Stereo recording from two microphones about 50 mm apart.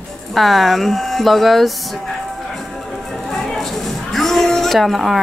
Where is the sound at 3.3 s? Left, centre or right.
Centre.